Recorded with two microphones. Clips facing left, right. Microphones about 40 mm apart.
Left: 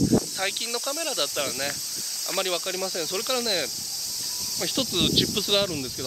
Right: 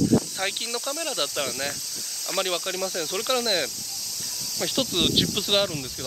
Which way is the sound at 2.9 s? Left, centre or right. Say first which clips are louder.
Right 3 dB; right.